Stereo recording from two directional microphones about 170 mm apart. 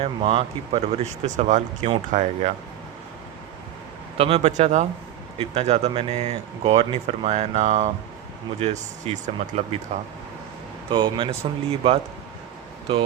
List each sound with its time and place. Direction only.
0.0 s speech: 30° right (ahead or behind); by 2.3 s 50° right (ahead or behind)
4.2 s speech: 35° right (ahead or behind)